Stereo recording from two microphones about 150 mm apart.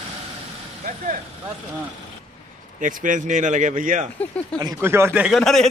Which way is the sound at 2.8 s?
60° right (ahead or behind).